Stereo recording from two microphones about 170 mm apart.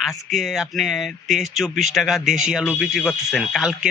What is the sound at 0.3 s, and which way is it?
Speech, centre (ahead or behind).